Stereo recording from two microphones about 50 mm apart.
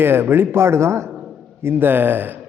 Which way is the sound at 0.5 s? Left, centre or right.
Right.